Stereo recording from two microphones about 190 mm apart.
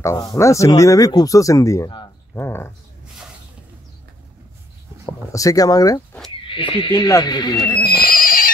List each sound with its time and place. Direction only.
0.0 s speech: 15° left (ahead or behind)
5.0 s speech: 15° left (ahead or behind)
7.8 s neigh: 50° left (ahead or behind)